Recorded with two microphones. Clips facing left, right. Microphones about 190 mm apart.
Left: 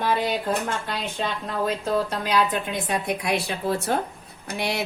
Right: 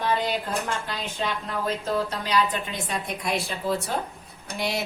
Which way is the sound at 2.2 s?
55° left (ahead or behind).